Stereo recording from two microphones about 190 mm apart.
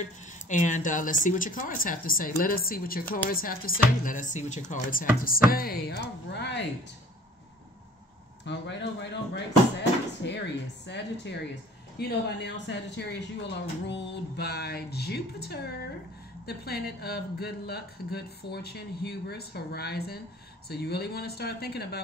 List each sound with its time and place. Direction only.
0.0 s a woman's voice: 40° left (ahead or behind); by 6.6 s 65° left (ahead or behind)
8.5 s speech: 65° left (ahead or behind)